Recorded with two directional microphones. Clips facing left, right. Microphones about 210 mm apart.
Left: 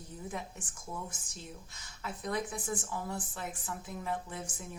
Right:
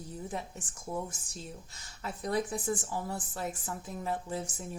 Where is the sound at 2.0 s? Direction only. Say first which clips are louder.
Right 3 dB; 35° right (ahead or behind).